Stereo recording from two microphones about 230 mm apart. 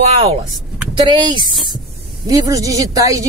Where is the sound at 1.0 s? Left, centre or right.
Centre.